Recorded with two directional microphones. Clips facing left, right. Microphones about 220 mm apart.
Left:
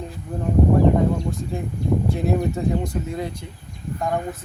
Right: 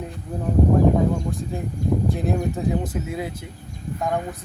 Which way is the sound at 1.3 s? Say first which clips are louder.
Left 1 dB; centre (ahead or behind).